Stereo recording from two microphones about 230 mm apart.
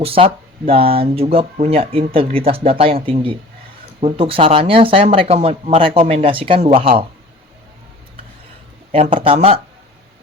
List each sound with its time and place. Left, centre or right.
0.0 s speech: right
8.9 s speech: right